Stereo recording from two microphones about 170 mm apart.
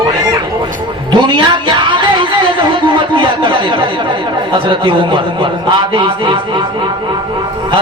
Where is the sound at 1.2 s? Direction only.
25° right (ahead or behind).